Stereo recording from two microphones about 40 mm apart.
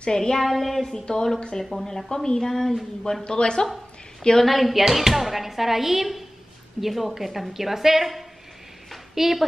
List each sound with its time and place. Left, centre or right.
0.0 s speech: centre
0.4 s speech: centre
1.6 s speech: centre
1.9 s speech: centre
3.3 s speech: left
4.4 s a woman's voice: centre